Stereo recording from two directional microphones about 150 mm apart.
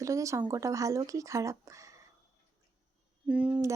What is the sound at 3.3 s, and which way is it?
Speech, 10° right (ahead or behind).